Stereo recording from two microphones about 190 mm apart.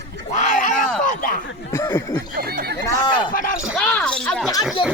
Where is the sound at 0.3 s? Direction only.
40° left (ahead or behind).